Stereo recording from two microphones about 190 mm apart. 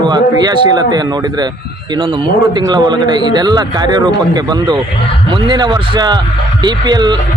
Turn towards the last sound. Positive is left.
turn(degrees=-25)  # may be behind; listen again after turning